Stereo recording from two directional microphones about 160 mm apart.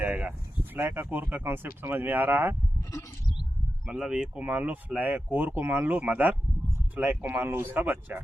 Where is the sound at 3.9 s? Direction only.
5° right (ahead or behind).